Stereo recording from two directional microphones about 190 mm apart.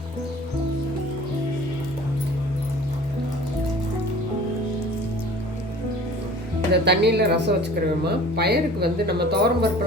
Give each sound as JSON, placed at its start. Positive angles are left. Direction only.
{"t": 6.8, "sound": "speech", "side_deg": -60}